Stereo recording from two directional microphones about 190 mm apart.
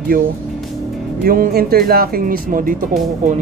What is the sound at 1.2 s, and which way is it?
Speech, 50° right (ahead or behind).